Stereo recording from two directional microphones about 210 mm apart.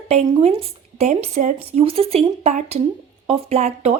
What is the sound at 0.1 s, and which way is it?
Speech, 30° right (ahead or behind).